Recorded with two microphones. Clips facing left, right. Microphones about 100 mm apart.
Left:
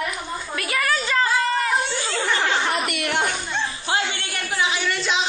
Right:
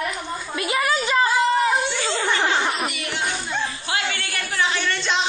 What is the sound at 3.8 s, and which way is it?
Music, 25° left (ahead or behind).